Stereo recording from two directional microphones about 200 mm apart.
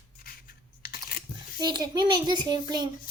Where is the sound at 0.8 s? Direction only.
50° left (ahead or behind).